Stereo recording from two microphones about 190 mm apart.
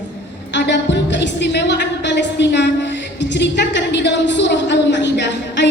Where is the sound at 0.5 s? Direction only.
65° left (ahead or behind).